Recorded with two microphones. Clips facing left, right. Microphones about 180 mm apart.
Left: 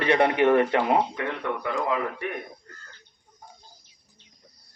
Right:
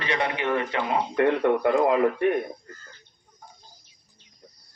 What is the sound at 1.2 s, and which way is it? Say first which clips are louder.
Speech: right 9 dB; 55° right (ahead or behind).